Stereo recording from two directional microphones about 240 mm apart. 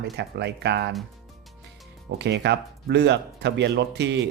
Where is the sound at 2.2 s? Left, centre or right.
Right.